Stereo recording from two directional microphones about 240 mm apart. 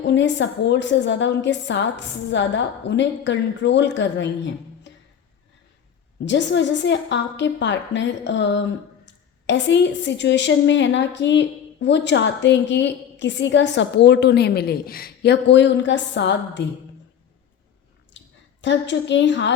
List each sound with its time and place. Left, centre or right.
0.0 s a woman's voice: left
6.2 s a woman's voice: left
18.6 s a woman's voice: left